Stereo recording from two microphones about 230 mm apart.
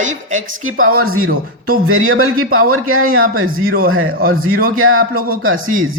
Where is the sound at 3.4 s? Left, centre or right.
Right.